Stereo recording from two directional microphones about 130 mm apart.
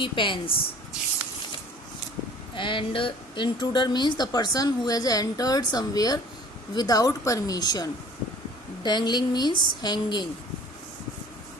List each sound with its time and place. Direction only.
0.0 s speech: 40° left (ahead or behind)
2.6 s speech: 40° left (ahead or behind)